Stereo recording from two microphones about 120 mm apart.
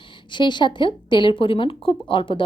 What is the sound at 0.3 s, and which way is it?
A woman's voice, 40° left (ahead or behind).